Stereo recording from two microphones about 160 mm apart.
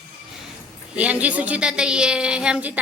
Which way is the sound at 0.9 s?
10° right (ahead or behind).